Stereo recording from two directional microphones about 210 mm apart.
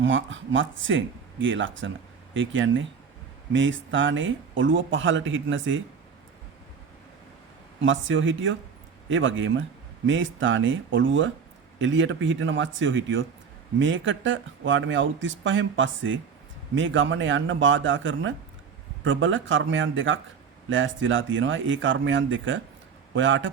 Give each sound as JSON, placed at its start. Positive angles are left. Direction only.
{"t": 0.0, "sound": "a man's voice", "side_deg": -65}
{"t": 7.8, "sound": "a man's voice", "side_deg": -65}